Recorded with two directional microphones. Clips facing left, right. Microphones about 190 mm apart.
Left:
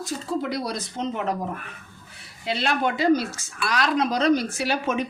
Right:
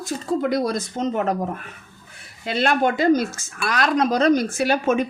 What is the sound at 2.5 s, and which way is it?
Speech, 50° right (ahead or behind).